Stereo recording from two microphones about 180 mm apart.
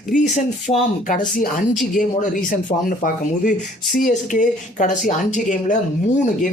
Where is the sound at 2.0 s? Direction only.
45° left (ahead or behind).